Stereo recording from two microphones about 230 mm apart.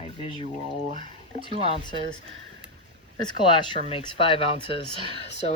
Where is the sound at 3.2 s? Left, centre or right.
Centre.